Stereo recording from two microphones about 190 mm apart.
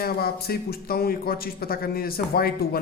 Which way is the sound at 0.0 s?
55° left (ahead or behind).